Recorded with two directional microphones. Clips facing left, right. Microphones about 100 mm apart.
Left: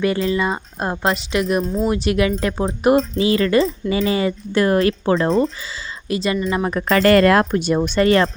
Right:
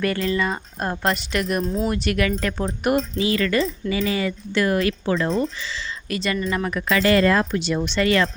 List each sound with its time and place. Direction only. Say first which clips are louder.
0.3 s speech: left 3 dB; 20° left (ahead or behind)
1.0 s a woman's voice: left 4 dB; centre (ahead or behind)
2.0 s speech: left 4 dB; 20° left (ahead or behind)